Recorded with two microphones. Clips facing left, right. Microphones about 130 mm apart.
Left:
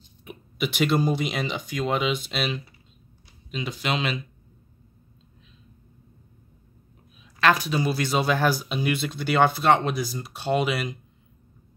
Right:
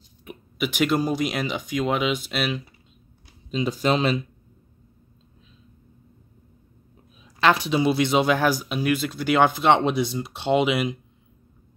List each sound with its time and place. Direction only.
0.2 s speech: 5° right (ahead or behind)
3.4 s speech: 30° right (ahead or behind)
7.3 s speech: 25° right (ahead or behind)